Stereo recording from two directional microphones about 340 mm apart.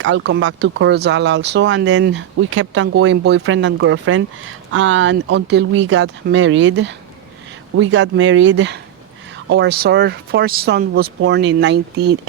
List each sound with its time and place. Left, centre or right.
0.0 s speech: right